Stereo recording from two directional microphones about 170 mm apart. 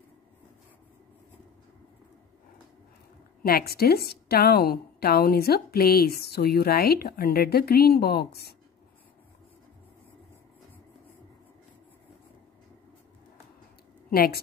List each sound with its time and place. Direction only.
3.4 s a woman's voice: 65° left (ahead or behind)
14.1 s a woman's voice: 65° left (ahead or behind)